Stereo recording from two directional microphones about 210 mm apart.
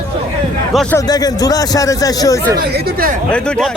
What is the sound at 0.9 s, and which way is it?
A man's voice, 20° left (ahead or behind).